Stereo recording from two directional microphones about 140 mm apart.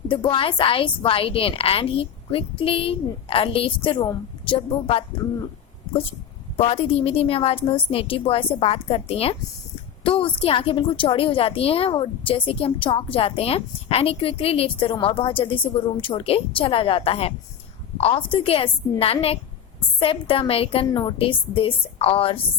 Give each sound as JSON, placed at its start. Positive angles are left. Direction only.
{"t": 0.1, "sound": "a woman's voice", "side_deg": 40}
{"t": 6.6, "sound": "a woman's voice", "side_deg": 45}